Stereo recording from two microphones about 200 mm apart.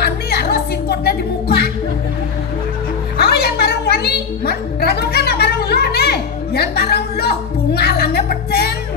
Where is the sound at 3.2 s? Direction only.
55° left (ahead or behind).